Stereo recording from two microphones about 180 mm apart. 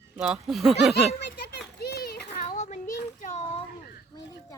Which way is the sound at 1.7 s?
60° left (ahead or behind).